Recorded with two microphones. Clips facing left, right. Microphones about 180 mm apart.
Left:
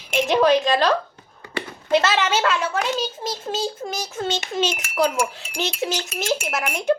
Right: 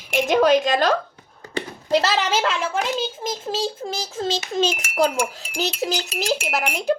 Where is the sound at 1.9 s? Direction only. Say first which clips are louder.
Left 1 dB; 35° right (ahead or behind).